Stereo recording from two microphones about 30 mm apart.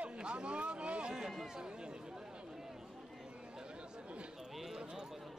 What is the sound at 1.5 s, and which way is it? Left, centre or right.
Speech, right.